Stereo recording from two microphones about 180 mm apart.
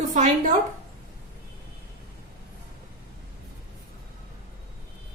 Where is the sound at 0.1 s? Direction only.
45° right (ahead or behind).